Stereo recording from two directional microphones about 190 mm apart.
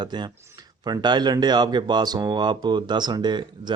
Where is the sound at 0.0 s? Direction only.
25° right (ahead or behind).